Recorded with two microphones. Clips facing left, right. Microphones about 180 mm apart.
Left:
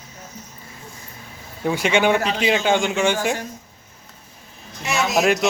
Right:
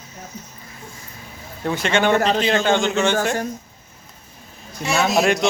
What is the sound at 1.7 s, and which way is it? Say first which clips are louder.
A man's voice: left 1 dB; 10° left (ahead or behind).